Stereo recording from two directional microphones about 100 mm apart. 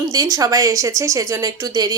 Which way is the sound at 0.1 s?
40° right (ahead or behind).